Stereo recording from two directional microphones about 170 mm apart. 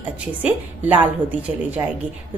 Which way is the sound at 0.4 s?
10° right (ahead or behind).